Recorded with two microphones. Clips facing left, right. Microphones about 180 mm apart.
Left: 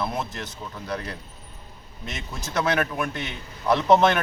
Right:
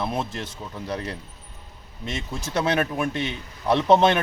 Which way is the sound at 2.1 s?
30° right (ahead or behind).